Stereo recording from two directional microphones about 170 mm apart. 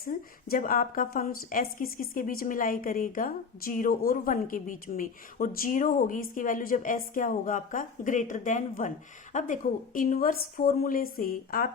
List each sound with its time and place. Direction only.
0.0 s a woman's voice: 55° left (ahead or behind)